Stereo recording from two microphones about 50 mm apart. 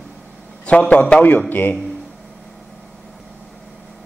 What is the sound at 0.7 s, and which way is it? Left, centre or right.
Speech, left.